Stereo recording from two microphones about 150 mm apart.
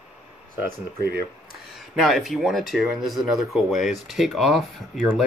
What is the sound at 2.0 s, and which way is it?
Speech, centre (ahead or behind).